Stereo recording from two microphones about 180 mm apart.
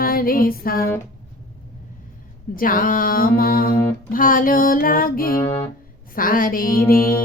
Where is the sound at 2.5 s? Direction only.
50° left (ahead or behind).